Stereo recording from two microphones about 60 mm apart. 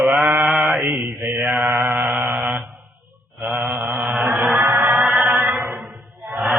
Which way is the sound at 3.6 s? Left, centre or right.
Right.